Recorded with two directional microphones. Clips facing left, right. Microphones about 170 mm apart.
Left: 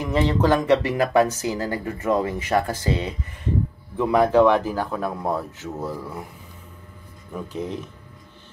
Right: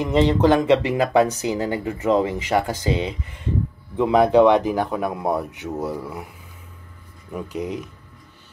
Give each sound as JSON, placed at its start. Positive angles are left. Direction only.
{"t": 0.0, "sound": "speech", "side_deg": -20}
{"t": 7.3, "sound": "speech", "side_deg": -10}